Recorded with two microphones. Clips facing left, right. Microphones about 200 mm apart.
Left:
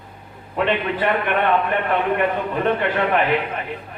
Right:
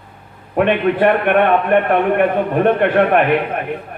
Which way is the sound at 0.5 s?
55° right (ahead or behind).